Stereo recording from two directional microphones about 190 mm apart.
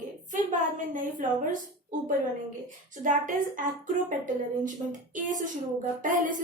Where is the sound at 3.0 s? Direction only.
45° right (ahead or behind).